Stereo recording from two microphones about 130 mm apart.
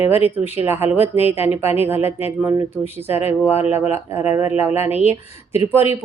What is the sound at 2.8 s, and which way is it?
Speech, 55° left (ahead or behind).